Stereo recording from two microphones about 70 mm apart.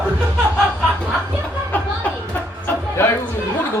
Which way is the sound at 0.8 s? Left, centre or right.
Right.